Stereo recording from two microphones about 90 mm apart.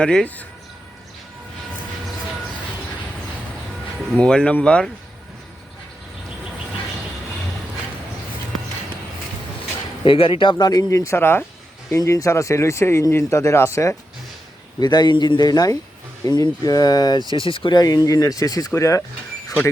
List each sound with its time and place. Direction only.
0.0 s speech: 10° left (ahead or behind)
4.2 s speech: 10° left (ahead or behind)
10.0 s speech: 75° left (ahead or behind); by 10.7 s 60° left (ahead or behind)
10.7 s speech: 40° left (ahead or behind)
14.8 s speech: 55° left (ahead or behind)
17.3 s speech: 75° left (ahead or behind); by 19.0 s 35° left (ahead or behind)